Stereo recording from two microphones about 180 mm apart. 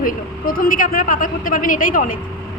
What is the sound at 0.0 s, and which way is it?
Speech, 50° left (ahead or behind).